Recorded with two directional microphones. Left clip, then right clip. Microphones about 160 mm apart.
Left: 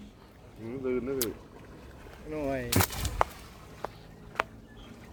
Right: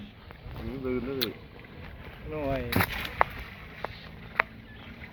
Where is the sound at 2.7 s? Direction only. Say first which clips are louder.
Right 1 dB; 10° left (ahead or behind).